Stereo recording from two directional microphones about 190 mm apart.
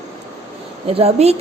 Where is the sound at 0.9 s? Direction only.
30° right (ahead or behind).